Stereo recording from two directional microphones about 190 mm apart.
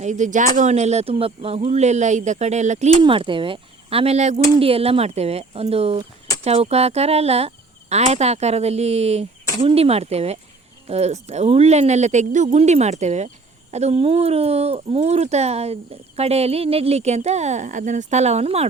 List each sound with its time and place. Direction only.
0.0 s speech: 40° right (ahead or behind)
3.0 s speech: 25° right (ahead or behind)